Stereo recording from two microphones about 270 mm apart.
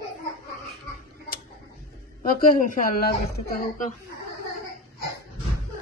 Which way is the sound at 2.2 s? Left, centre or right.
Left.